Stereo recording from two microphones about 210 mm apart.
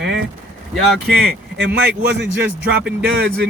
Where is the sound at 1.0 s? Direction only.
50° right (ahead or behind).